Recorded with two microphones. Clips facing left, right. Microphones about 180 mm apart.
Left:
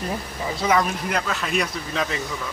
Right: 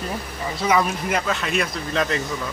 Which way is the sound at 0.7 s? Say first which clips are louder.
Right 1 dB; 5° right (ahead or behind).